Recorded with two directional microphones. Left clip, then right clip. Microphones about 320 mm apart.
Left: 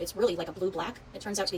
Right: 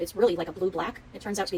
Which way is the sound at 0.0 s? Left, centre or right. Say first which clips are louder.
Right 4 dB; right.